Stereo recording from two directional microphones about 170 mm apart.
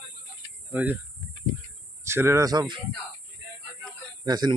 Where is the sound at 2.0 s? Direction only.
15° right (ahead or behind).